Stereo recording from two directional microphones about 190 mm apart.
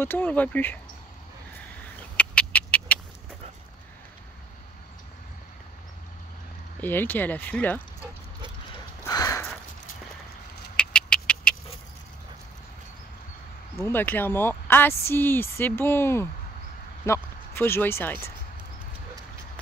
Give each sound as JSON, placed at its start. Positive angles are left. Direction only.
{"t": 0.0, "sound": "speech", "side_deg": 10}
{"t": 2.1, "sound": "cat", "side_deg": 5}
{"t": 6.8, "sound": "speech", "side_deg": 10}
{"t": 9.0, "sound": "a sound", "side_deg": 20}
{"t": 10.8, "sound": "a sound", "side_deg": 5}
{"t": 13.7, "sound": "speech", "side_deg": 10}